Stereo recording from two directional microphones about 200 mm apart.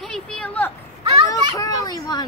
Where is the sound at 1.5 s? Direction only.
20° left (ahead or behind).